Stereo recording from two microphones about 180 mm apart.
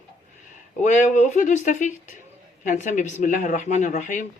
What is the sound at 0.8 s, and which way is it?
A man's voice, 45° left (ahead or behind).